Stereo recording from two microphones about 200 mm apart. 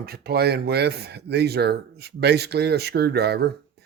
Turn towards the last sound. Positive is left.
turn(degrees=-55)  # may be behind; listen again after turning